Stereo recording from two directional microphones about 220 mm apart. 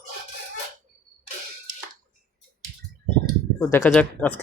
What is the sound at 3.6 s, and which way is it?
Speech, 10° left (ahead or behind).